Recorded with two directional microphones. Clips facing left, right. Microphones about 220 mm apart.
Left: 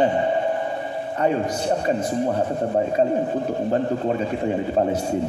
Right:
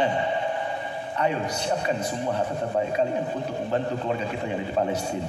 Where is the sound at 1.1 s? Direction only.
45° left (ahead or behind).